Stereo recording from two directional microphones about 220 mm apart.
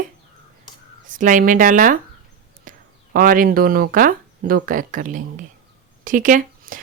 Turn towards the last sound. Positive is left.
turn(degrees=-40)  # may be behind; listen again after turning